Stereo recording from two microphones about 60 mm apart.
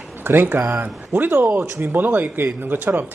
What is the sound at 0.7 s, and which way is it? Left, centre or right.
Speech, right.